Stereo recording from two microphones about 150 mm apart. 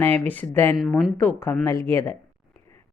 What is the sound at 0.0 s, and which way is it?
Speech, 10° left (ahead or behind).